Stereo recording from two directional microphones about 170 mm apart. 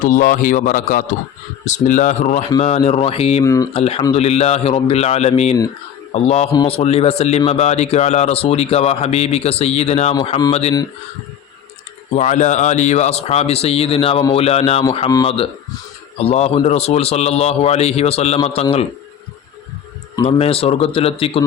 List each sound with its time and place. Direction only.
0.0 s speech: 50° left (ahead or behind); by 3.4 s 35° left (ahead or behind)
3.4 s mantra: 20° left (ahead or behind)
3.7 s a man's voice: 35° left (ahead or behind)
10.2 s mantra: 25° left (ahead or behind)
10.5 s speech: 35° left (ahead or behind)
12.1 s speech: 45° left (ahead or behind)
20.1 s speech: 35° left (ahead or behind)